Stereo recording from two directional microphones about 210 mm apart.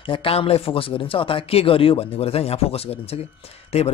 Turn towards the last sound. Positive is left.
turn(degrees=30)  # may be behind; listen again after turning